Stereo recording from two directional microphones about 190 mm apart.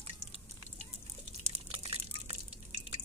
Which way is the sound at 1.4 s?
30° right (ahead or behind).